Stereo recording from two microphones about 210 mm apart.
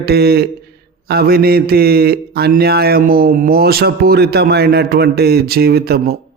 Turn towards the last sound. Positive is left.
turn(degrees=-45)  # may be behind; listen again after turning